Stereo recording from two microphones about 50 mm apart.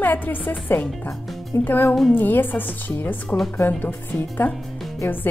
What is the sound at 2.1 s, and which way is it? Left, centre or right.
Speech, left.